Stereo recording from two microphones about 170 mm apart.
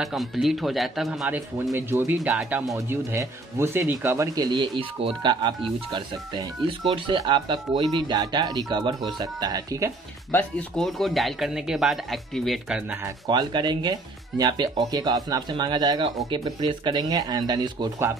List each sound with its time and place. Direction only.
0.0 s speech: centre (ahead or behind); by 9.9 s 20° right (ahead or behind)
10.3 s speech: centre (ahead or behind)
13.0 s speech: 25° right (ahead or behind)